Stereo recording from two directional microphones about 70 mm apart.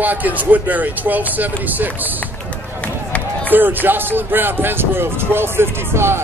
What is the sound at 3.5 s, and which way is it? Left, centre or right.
Speech, right.